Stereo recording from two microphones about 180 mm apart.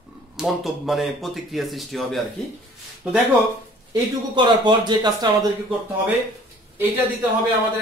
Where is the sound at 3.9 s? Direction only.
25° right (ahead or behind).